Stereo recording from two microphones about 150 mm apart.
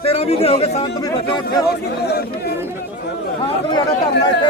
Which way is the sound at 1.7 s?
90° left.